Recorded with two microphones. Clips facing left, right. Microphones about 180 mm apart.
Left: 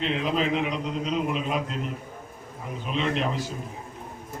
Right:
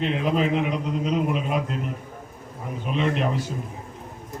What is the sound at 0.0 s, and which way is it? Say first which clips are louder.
A man's voice: right 3 dB; 50° right (ahead or behind).